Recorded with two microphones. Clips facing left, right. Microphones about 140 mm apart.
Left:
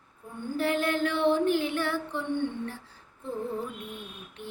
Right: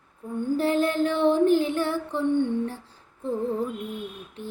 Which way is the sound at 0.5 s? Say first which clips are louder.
Right 4 dB; 35° right (ahead or behind).